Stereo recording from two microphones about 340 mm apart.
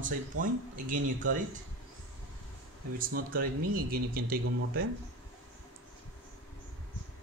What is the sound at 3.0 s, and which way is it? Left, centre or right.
Speech, right.